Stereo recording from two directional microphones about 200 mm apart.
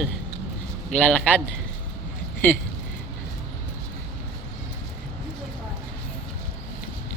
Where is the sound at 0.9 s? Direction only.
5° left (ahead or behind).